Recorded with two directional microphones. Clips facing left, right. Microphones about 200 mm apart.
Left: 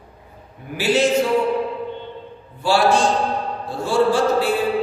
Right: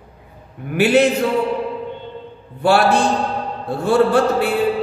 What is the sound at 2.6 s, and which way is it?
Mantra, 60° right (ahead or behind).